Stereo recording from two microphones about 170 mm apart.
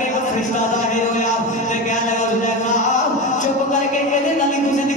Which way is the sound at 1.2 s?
45° left (ahead or behind).